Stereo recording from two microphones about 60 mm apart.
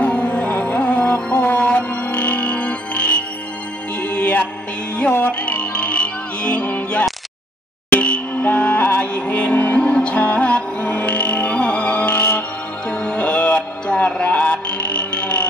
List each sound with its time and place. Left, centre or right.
0.0 s music: centre
8.8 s music: left
9.1 s music: left